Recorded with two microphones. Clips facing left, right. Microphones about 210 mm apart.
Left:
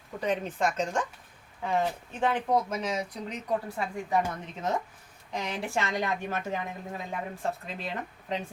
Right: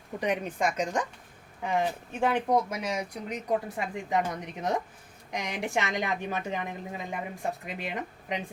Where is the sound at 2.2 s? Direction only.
10° right (ahead or behind).